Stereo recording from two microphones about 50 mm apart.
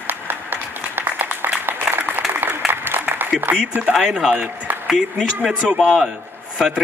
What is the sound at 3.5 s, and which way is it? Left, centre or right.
Speech, right.